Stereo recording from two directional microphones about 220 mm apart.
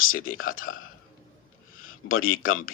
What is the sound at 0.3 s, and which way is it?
Speech, 65° left (ahead or behind).